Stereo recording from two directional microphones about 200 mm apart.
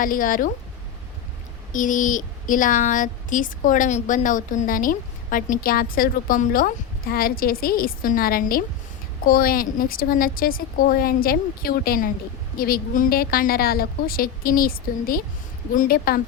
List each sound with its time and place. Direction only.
0.0 s a woman's voice: 45° left (ahead or behind)
1.7 s a woman's voice: 40° left (ahead or behind)